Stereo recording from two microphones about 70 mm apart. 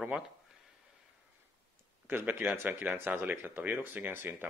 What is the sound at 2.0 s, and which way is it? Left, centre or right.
Speech, right.